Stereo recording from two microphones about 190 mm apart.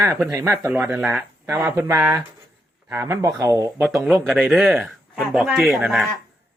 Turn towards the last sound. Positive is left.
turn(degrees=0)  # may be behind; listen again after turning